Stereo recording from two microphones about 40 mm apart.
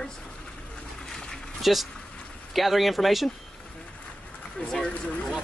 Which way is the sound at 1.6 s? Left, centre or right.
Centre.